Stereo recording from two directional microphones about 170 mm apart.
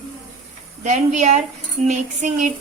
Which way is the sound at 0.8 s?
45° right (ahead or behind).